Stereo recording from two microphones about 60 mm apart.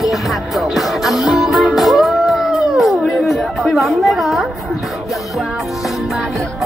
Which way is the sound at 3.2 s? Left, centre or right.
Centre.